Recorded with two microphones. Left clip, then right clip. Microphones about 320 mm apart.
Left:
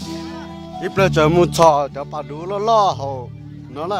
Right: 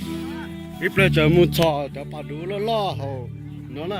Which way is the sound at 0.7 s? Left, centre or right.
Left.